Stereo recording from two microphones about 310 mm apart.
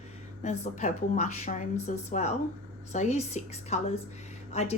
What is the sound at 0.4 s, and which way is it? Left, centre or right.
Speech, left.